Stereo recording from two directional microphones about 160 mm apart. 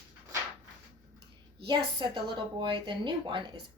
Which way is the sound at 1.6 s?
30° right (ahead or behind).